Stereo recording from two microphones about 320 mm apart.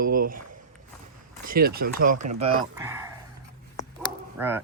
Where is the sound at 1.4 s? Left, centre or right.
Right.